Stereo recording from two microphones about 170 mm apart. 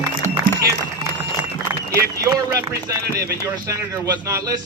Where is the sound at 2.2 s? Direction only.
15° right (ahead or behind).